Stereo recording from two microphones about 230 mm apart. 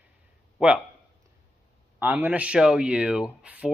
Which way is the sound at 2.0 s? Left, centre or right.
Centre.